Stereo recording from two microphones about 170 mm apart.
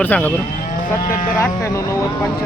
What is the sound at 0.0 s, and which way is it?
Speech, 10° left (ahead or behind).